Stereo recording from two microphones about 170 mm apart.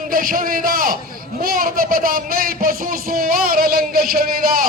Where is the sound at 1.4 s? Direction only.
60° right (ahead or behind).